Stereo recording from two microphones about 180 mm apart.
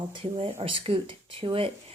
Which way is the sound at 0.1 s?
30° right (ahead or behind).